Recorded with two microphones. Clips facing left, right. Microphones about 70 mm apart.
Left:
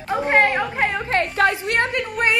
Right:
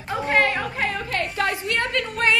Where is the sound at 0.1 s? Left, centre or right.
Left.